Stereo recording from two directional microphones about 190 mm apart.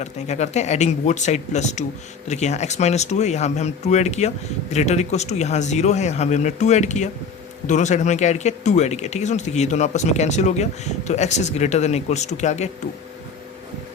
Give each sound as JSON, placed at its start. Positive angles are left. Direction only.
{"t": 0.0, "sound": "speech", "side_deg": 35}